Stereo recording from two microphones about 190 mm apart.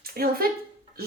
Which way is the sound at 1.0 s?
55° right (ahead or behind).